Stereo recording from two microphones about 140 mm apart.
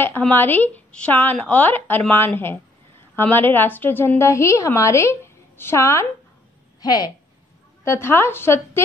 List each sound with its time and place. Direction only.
0.3 s a woman's voice: 15° left (ahead or behind)